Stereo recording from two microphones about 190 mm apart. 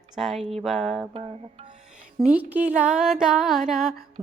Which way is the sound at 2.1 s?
5° right (ahead or behind).